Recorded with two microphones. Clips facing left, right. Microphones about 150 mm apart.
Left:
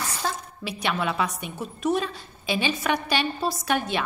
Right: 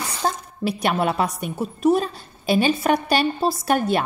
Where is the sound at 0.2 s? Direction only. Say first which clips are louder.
Right 6 dB; 50° right (ahead or behind).